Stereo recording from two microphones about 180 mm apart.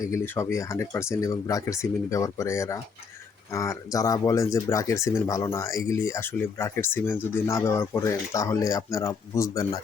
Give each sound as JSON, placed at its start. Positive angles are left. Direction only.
{"t": 0.0, "sound": "speech", "side_deg": 15}